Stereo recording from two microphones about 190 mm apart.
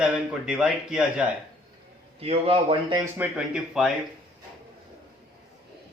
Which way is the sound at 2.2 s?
30° right (ahead or behind).